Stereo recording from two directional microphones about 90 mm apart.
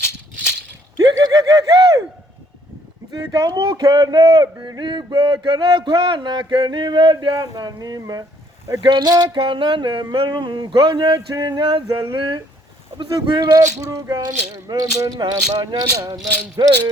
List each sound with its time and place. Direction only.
1.1 s snicker: 40° right (ahead or behind)
3.1 s speech: 45° right (ahead or behind)
11.1 s speech: 50° right (ahead or behind)
11.9 s speech: 35° right (ahead or behind)
12.1 s speech: 65° right (ahead or behind)
13.0 s speech: 55° right (ahead or behind)